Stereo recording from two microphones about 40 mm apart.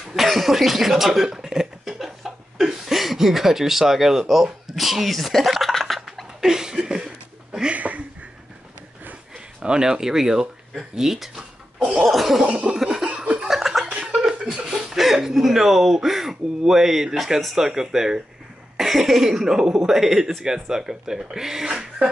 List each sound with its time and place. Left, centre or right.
0.1 s speech: centre
2.0 s chuckle: centre
6.4 s a sound: centre
7.7 s a sound: right
9.6 s speech: centre
12.0 s cough: centre
12.4 s laughter: right
12.7 s laughter: centre
13.5 s a sound: centre
13.8 s a sound: right
14.2 s chuckle: centre
15.0 s speech: centre
19.9 s speech: centre